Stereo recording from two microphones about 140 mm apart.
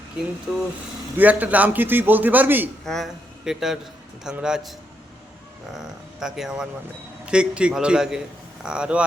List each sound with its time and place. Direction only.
0.5 s a man's voice: 10° right (ahead or behind)
2.8 s a man's voice: centre (ahead or behind)
5.7 s a man's voice: centre (ahead or behind)